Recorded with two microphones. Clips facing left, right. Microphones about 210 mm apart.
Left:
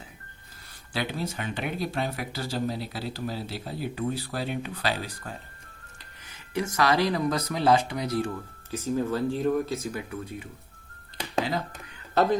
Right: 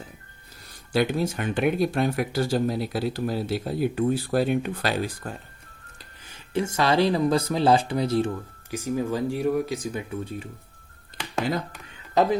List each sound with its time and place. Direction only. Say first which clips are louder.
0.9 s speech: right 8 dB; 50° right (ahead or behind)
6.5 s speech: right 2 dB; 25° right (ahead or behind)
8.7 s speech: right 1 dB; 15° right (ahead or behind)